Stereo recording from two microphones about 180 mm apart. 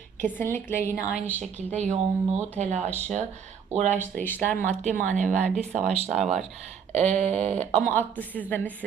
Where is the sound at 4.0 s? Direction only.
10° left (ahead or behind).